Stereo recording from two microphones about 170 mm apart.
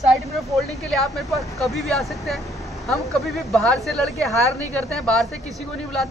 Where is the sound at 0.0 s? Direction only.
Centre (ahead or behind).